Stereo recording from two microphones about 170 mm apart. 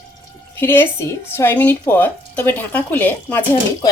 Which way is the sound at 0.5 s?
15° left (ahead or behind).